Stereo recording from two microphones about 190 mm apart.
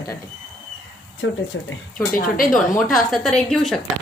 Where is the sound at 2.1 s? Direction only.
45° left (ahead or behind).